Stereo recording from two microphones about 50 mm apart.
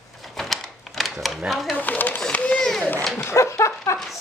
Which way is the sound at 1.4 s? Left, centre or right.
Centre.